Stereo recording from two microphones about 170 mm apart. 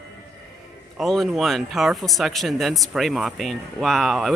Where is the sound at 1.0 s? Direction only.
Centre (ahead or behind).